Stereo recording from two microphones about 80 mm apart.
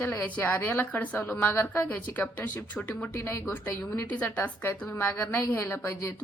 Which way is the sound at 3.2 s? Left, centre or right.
Left.